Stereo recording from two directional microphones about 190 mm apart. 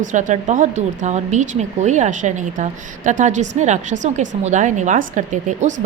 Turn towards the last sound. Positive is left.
turn(degrees=-40)  # may be behind; listen again after turning